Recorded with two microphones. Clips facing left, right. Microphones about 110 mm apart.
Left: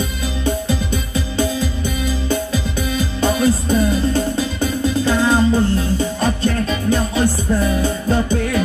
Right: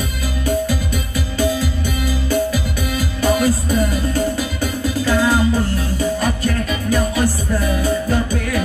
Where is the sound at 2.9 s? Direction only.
25° left (ahead or behind).